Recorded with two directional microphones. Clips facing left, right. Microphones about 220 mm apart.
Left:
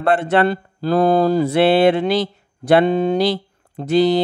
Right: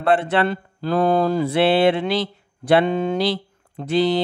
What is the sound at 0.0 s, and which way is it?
Speech, 45° left (ahead or behind).